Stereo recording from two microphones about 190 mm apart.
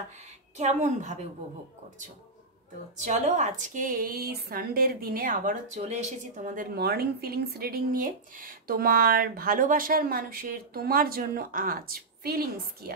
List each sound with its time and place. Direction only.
0.6 s a woman's voice: 35° right (ahead or behind)
3.0 s a woman's voice: 40° right (ahead or behind); by 12.9 s 55° right (ahead or behind)